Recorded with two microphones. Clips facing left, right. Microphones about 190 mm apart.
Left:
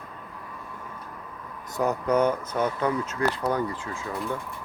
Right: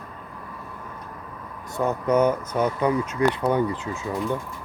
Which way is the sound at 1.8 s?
5° right (ahead or behind).